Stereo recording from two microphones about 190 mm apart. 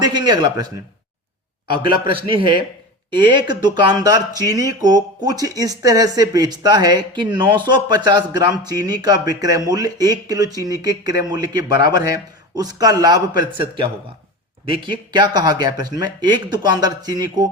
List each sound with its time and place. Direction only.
0.0 s speech: 20° right (ahead or behind)
1.7 s speech: 25° right (ahead or behind)